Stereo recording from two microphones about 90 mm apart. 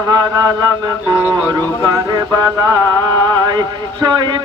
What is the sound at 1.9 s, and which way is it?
Mantra, 45° right (ahead or behind).